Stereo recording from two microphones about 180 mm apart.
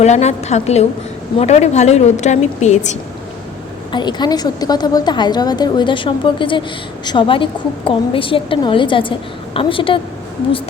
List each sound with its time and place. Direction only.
0.0 s a woman's voice: 40° left (ahead or behind)
3.9 s a woman's voice: 25° left (ahead or behind)